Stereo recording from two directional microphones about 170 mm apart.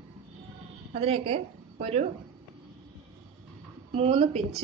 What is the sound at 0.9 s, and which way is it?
A woman's voice, 35° right (ahead or behind).